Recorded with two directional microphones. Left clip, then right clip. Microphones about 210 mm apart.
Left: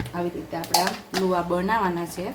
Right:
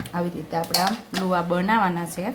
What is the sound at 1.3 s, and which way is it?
Speech, 20° right (ahead or behind).